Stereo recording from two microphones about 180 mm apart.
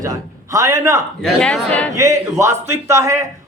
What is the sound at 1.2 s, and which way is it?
Speech, 5° left (ahead or behind).